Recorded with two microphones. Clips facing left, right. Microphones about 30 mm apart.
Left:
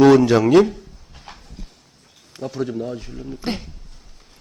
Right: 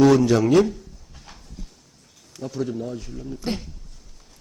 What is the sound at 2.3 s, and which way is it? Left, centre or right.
A man's voice, left.